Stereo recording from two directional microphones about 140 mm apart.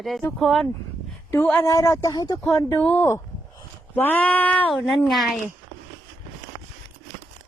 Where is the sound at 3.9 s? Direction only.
15° left (ahead or behind).